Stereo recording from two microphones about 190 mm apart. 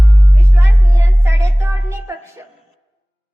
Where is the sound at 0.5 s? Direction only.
15° right (ahead or behind).